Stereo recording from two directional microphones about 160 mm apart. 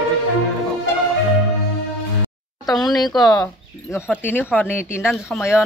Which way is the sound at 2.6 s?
Centre (ahead or behind).